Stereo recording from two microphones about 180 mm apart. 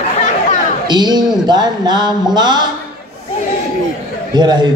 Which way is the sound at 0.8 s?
25° right (ahead or behind).